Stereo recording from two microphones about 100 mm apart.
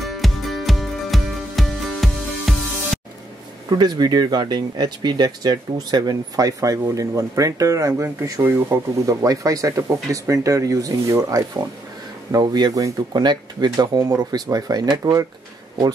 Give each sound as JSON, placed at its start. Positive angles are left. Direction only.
{"t": 0.0, "sound": "music", "side_deg": 0}
{"t": 3.7, "sound": "speech", "side_deg": -45}